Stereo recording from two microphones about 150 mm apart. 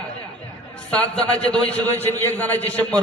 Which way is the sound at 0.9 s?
5° left (ahead or behind).